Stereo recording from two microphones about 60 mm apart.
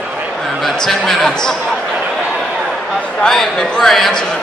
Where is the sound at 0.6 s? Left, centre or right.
Centre.